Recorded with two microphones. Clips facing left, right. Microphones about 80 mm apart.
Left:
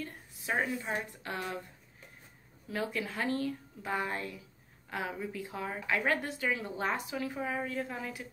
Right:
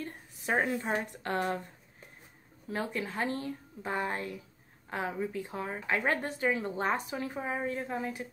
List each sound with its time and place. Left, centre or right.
0.0 s a sound: right
0.7 s a woman's voice: right
2.7 s a woman's voice: right